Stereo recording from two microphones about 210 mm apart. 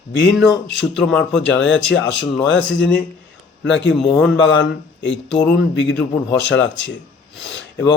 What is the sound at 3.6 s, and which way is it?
Speech, 60° left (ahead or behind).